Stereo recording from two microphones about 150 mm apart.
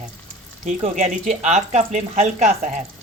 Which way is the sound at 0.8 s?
45° right (ahead or behind).